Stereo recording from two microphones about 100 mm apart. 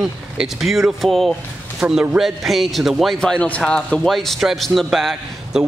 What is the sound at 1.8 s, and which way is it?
Speech, 20° right (ahead or behind).